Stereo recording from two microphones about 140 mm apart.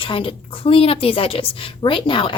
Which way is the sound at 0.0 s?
40° left (ahead or behind).